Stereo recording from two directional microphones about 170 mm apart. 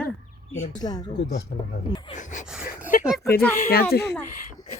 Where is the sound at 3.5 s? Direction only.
50° left (ahead or behind).